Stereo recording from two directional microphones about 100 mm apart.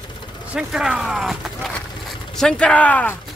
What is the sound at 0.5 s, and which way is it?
Speech, 5° right (ahead or behind).